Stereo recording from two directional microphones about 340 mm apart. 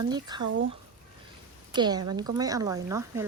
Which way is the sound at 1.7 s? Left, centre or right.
Centre.